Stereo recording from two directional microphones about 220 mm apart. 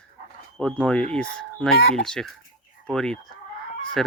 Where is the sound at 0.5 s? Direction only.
5° left (ahead or behind).